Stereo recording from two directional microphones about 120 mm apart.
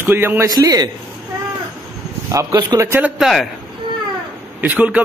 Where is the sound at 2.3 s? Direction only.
25° right (ahead or behind).